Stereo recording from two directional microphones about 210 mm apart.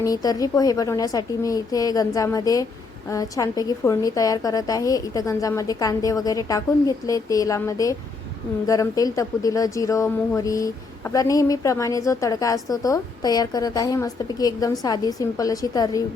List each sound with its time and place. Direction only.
0.0 s a woman's voice: 15° left (ahead or behind)